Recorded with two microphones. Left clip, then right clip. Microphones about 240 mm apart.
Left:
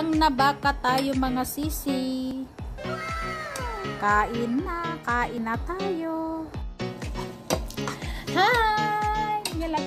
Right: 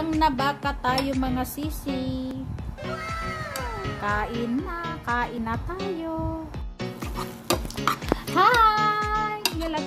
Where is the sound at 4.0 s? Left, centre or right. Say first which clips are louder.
Left 5 dB; centre.